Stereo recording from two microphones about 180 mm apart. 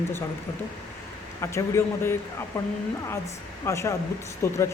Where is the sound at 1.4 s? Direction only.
15° left (ahead or behind).